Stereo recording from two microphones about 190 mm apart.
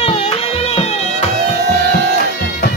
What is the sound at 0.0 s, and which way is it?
Music, 30° left (ahead or behind).